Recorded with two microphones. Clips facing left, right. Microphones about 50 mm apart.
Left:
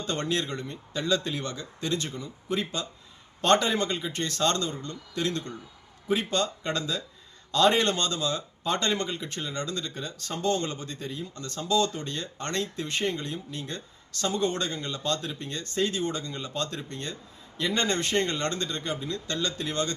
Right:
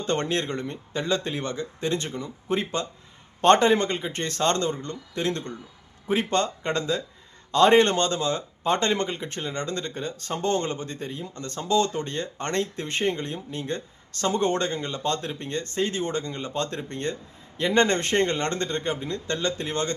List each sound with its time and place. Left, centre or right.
0.0 s speech: right